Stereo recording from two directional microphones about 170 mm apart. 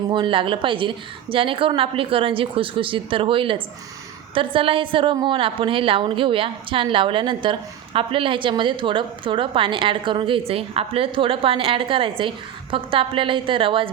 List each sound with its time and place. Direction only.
0.1 s a woman's voice: 30° right (ahead or behind)